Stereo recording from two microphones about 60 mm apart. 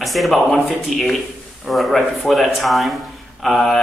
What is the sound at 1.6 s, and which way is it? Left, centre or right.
Speech, centre.